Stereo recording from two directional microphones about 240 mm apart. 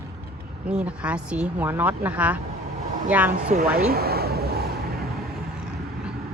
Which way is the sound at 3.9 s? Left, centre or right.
Right.